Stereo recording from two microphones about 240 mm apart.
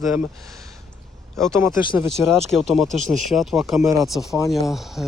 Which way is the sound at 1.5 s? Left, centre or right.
Centre.